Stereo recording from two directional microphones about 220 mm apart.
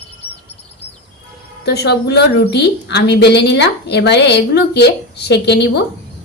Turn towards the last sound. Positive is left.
turn(degrees=50)  # may be behind; listen again after turning